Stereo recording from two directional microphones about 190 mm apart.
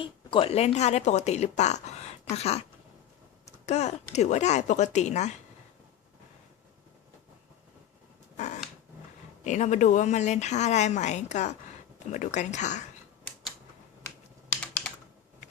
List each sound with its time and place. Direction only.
0.0 s speech: 25° left (ahead or behind)
3.7 s speech: 35° left (ahead or behind)
8.4 s a sound: 40° left (ahead or behind)
9.4 s speech: 40° left (ahead or behind)
14.6 s typing: 5° left (ahead or behind)